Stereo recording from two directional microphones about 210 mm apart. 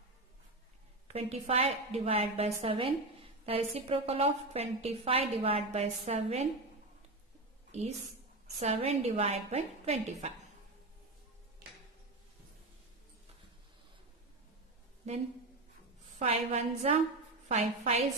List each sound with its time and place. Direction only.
1.1 s a woman's voice: 30° right (ahead or behind)
8.5 s a woman's voice: 30° right (ahead or behind)
16.2 s a woman's voice: 30° right (ahead or behind)